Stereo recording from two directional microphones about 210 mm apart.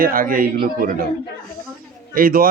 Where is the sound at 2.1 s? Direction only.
45° right (ahead or behind).